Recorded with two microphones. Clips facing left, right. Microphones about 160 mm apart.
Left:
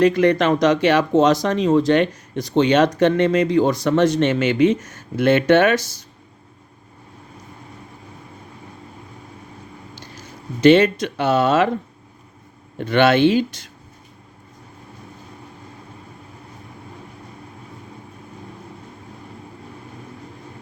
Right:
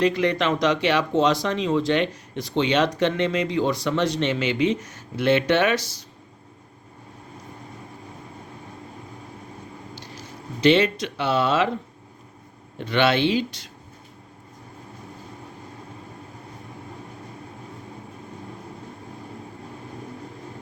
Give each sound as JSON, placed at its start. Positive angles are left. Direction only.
{"t": 0.0, "sound": "speech", "side_deg": 50}
{"t": 10.2, "sound": "speech", "side_deg": 50}
{"t": 12.8, "sound": "speech", "side_deg": 50}